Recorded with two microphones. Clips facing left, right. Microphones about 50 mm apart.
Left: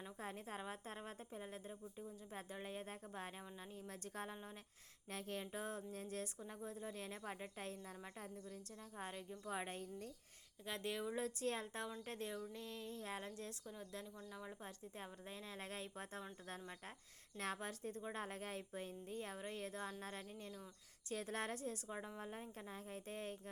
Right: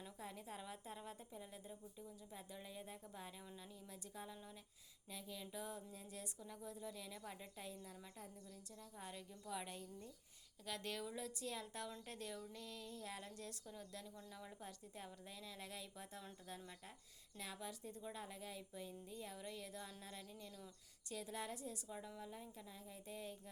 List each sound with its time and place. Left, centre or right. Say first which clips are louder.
0.2 s a woman's voice: left 4 dB; left
5.5 s speech: left 3 dB; left
6.4 s a woman's voice: left 2 dB; left
10.7 s speech: left 3 dB; left
11.1 s a woman's voice: left 6 dB; left
14.2 s speech: left 3 dB; centre
14.6 s a woman's voice: left 2 dB; left
17.3 s speech: left 6 dB; left